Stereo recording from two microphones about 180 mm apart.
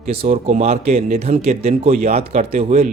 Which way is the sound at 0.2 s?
35° right (ahead or behind).